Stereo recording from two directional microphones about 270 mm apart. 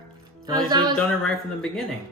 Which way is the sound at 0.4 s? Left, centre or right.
Centre.